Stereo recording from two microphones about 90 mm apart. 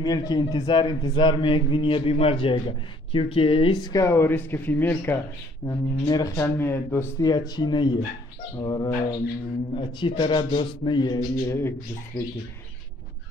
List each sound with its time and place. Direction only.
0.0 s speech: 50° left (ahead or behind); by 3.7 s 90° left
3.8 s speech: 40° left (ahead or behind)
4.1 s speech: 25° left (ahead or behind)
5.7 s speech: 45° left (ahead or behind)
6.3 s speech: 25° left (ahead or behind)
7.2 s speech: 50° left (ahead or behind)
9.8 s a man's voice: 65° left (ahead or behind)
11.4 s speech: 30° left (ahead or behind)